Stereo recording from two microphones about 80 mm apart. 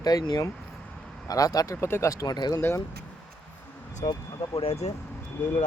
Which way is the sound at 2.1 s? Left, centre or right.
Left.